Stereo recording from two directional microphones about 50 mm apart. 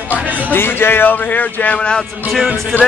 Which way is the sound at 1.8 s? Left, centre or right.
Centre.